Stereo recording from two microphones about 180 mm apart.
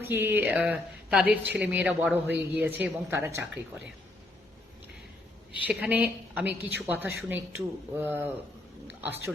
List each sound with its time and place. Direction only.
0.0 s speech: 10° right (ahead or behind)
5.5 s a woman's voice: 10° right (ahead or behind)